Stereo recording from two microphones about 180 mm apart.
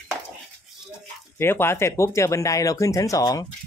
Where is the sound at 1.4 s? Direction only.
15° left (ahead or behind).